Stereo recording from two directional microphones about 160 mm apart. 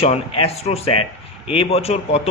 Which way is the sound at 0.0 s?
40° left (ahead or behind).